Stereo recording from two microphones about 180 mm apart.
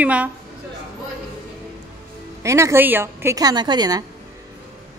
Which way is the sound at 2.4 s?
15° right (ahead or behind).